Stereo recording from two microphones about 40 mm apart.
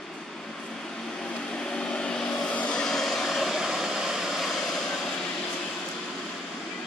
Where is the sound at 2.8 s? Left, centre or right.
Centre.